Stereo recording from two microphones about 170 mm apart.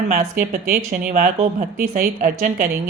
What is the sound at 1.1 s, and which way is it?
A woman's voice, 45° right (ahead or behind).